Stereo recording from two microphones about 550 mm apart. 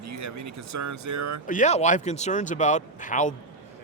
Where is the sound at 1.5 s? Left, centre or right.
Centre.